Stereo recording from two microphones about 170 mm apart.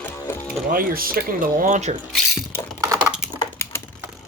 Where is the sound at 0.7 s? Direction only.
55° right (ahead or behind).